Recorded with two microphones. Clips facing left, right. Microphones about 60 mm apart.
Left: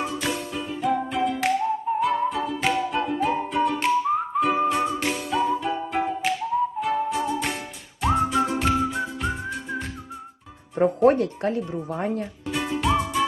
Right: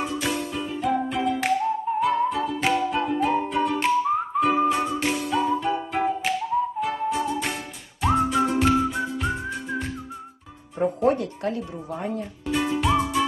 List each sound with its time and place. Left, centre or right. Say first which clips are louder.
0.0 s music: right 1 dB; centre
8.0 s whistling: even; centre
10.8 s speech: left 4 dB; left
12.5 s music: right 2 dB; centre